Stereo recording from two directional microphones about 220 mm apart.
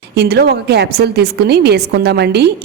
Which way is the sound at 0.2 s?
45° right (ahead or behind).